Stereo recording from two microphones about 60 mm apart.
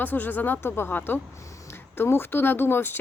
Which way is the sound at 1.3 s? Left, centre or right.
Left.